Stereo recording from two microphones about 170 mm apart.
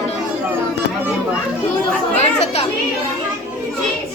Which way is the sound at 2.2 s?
40° left (ahead or behind).